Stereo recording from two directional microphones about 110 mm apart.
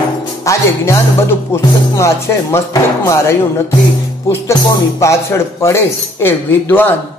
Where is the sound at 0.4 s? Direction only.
30° left (ahead or behind).